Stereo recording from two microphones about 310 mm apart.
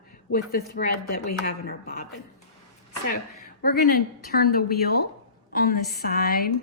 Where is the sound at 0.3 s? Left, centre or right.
Left.